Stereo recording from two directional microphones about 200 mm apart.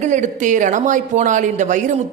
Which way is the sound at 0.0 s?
40° right (ahead or behind).